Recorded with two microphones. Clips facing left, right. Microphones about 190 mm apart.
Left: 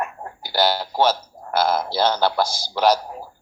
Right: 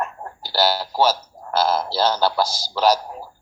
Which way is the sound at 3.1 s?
15° left (ahead or behind).